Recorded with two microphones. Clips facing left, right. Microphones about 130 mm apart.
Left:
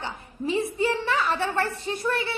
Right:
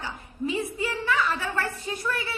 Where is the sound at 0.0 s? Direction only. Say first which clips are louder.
Left 1 dB; 30° left (ahead or behind).